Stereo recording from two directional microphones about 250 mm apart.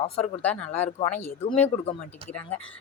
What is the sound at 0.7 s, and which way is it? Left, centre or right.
Speech, left.